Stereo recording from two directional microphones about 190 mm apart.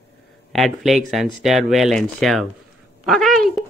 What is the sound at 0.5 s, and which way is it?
Speech, centre (ahead or behind).